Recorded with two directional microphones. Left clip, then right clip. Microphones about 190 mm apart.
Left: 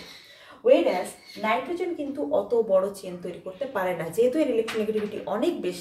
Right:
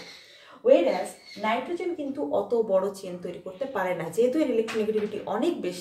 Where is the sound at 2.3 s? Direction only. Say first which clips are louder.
Left 2 dB; 15° right (ahead or behind).